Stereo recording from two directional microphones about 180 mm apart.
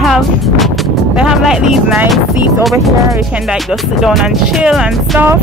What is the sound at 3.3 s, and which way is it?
Speech, 5° right (ahead or behind).